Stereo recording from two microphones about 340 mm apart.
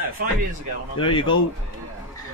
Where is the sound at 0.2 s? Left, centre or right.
Right.